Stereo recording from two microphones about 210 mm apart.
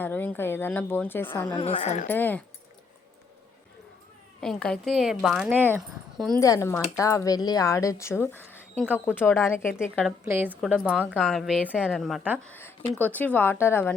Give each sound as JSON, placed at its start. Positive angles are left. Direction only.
{"t": 0.0, "sound": "speech", "side_deg": 10}
{"t": 1.5, "sound": "a woman's voice", "side_deg": 25}
{"t": 2.0, "sound": "speech", "side_deg": 10}
{"t": 4.4, "sound": "a woman's voice", "side_deg": 5}
{"t": 6.4, "sound": "speech", "side_deg": 15}
{"t": 10.1, "sound": "a woman's voice", "side_deg": -10}
{"t": 12.5, "sound": "speech", "side_deg": 10}